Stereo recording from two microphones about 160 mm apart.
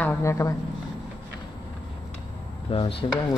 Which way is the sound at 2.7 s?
35° left (ahead or behind).